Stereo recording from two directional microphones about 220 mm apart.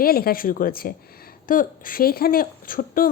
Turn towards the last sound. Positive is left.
turn(degrees=40)  # may be behind; listen again after turning